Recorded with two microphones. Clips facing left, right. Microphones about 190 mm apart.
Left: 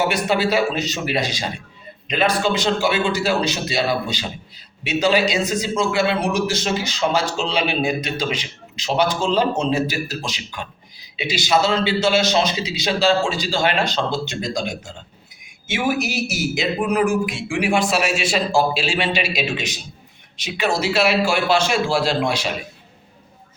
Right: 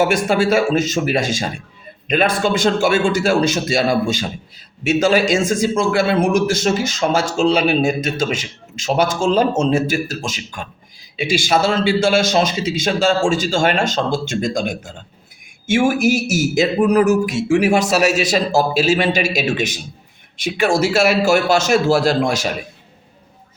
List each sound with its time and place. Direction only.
0.0 s a man's voice: 50° right (ahead or behind)